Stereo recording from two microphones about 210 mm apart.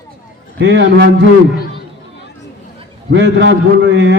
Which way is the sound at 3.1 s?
60° right (ahead or behind).